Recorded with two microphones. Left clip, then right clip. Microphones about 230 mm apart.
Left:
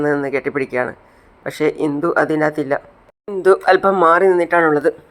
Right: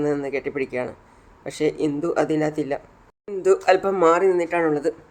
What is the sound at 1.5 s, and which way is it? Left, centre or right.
Speech, centre.